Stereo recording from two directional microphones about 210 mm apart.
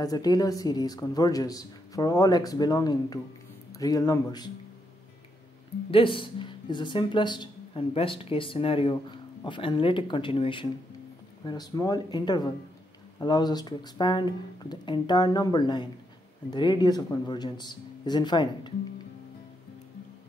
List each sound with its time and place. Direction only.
0.0 s speech: 20° left (ahead or behind)
5.9 s speech: 25° left (ahead or behind)